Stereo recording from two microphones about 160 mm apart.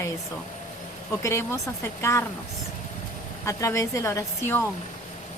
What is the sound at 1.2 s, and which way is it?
Speech, 15° left (ahead or behind).